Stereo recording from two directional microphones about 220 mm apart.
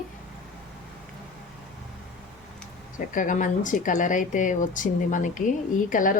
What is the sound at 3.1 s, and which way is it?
Speech, 35° left (ahead or behind).